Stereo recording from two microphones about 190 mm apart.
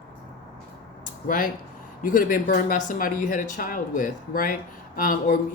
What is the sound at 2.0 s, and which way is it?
Speech, 45° left (ahead or behind).